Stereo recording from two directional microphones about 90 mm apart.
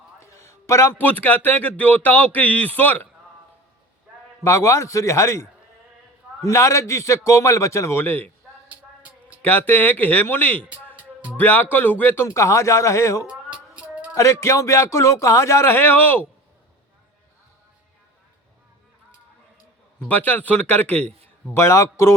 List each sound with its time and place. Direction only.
0.2 s a man's voice: 35° left (ahead or behind)
4.4 s a man's voice: 30° left (ahead or behind)
9.4 s a man's voice: 20° left (ahead or behind)
10.9 s music: 15° right (ahead or behind)
11.3 s a man's voice: 20° left (ahead or behind)
13.2 s a sound: 10° right (ahead or behind)
14.2 s a man's voice: 35° left (ahead or behind)
20.1 s speech: 20° left (ahead or behind)
21.5 s a man's voice: 30° left (ahead or behind)